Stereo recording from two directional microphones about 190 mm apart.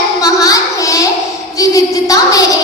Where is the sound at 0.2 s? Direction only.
20° left (ahead or behind).